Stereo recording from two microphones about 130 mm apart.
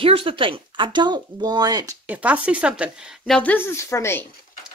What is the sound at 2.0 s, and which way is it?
Speech, 10° right (ahead or behind).